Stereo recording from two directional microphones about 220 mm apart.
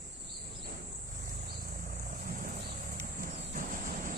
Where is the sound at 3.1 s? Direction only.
40° right (ahead or behind).